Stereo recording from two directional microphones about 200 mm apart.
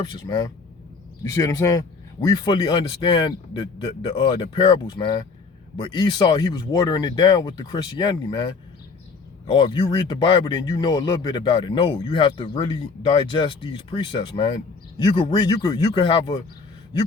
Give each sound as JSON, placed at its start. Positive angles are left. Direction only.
{"t": 0.0, "sound": "speech", "side_deg": 20}